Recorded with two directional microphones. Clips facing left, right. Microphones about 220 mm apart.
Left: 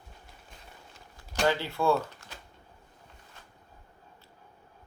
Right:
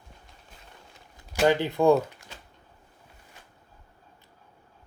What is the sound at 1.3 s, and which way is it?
Speech, 15° right (ahead or behind).